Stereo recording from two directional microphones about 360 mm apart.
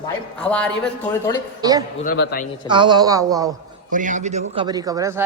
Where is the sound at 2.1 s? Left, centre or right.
Left.